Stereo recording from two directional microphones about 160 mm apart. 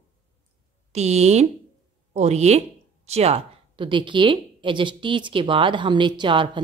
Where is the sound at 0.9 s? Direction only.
45° right (ahead or behind).